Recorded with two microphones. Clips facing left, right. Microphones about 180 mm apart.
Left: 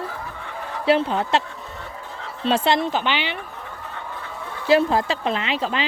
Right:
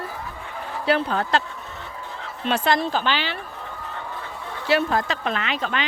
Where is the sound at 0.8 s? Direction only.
25° left (ahead or behind).